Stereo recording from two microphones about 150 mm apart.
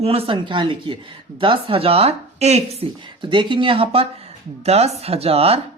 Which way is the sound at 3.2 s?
30° right (ahead or behind).